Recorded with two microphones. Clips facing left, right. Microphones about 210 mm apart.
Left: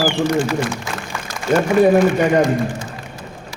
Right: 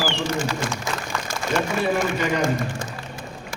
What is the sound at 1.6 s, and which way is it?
Speech, 45° left (ahead or behind).